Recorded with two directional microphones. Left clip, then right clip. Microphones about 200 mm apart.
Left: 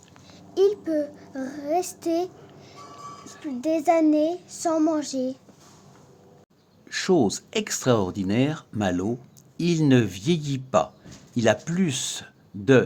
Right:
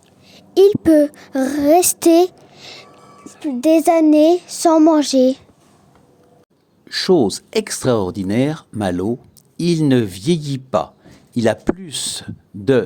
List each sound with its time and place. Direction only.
0.3 s speech: 45° right (ahead or behind)
6.8 s speech: 25° right (ahead or behind)